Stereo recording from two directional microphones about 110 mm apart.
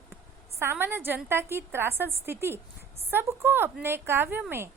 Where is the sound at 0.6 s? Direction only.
20° right (ahead or behind).